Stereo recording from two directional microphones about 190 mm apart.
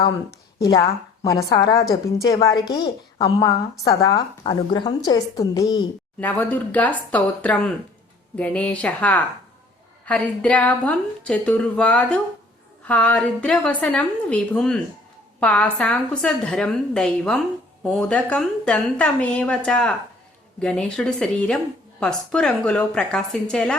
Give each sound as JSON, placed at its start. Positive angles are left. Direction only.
{"t": 0.0, "sound": "a woman's voice", "side_deg": 20}
{"t": 6.1, "sound": "a woman's voice", "side_deg": 10}